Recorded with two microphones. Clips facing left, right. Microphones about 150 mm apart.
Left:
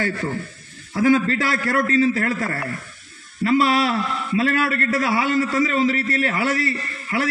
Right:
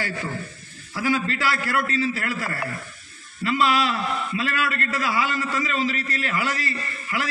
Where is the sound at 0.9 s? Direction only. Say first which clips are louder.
Left 7 dB; 45° left (ahead or behind).